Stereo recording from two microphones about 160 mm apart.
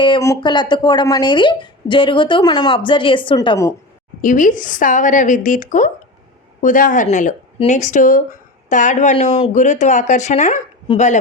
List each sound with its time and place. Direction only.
0.2 s speech: 25° left (ahead or behind)
4.2 s a woman's voice: 55° left (ahead or behind)
9.1 s speech: 35° left (ahead or behind)
9.6 s a woman's voice: 50° left (ahead or behind)